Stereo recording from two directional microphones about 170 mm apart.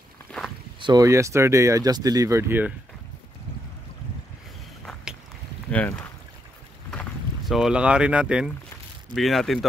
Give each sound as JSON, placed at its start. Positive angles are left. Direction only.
{"t": 0.7, "sound": "speech", "side_deg": -25}
{"t": 5.7, "sound": "speech", "side_deg": 10}
{"t": 6.9, "sound": "boat", "side_deg": 0}
{"t": 9.1, "sound": "speech", "side_deg": 0}